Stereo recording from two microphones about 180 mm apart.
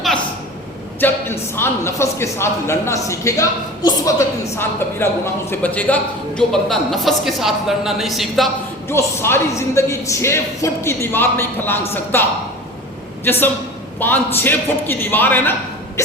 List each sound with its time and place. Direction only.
0.9 s a man's voice: 10° left (ahead or behind)
8.9 s a man's voice: 15° left (ahead or behind)